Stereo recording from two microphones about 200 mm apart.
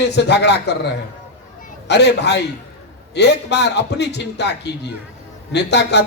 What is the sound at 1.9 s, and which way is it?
Speech, 55° left (ahead or behind).